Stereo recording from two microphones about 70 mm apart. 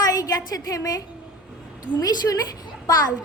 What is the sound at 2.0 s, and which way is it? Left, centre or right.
Speech, left.